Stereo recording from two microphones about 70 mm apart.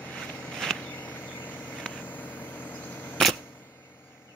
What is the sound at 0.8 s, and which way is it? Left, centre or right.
Insect, left.